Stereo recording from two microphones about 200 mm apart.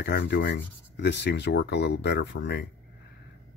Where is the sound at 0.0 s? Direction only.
60° left (ahead or behind).